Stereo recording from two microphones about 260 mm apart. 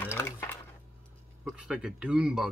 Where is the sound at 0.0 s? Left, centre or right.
Centre.